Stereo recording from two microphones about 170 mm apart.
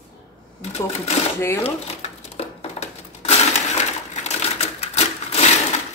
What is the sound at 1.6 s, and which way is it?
Crumpling, 35° left (ahead or behind).